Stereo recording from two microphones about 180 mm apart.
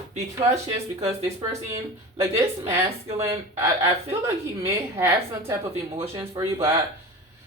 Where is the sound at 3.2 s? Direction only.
15° right (ahead or behind).